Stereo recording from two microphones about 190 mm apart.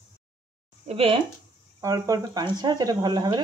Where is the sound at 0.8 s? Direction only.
30° right (ahead or behind).